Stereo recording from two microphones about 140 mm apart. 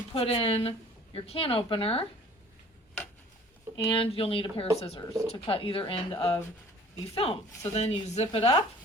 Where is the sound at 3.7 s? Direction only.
40° left (ahead or behind).